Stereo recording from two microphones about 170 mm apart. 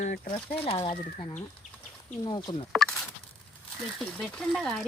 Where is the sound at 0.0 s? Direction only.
45° left (ahead or behind).